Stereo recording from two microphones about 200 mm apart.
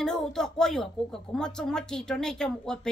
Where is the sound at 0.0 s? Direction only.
5° left (ahead or behind).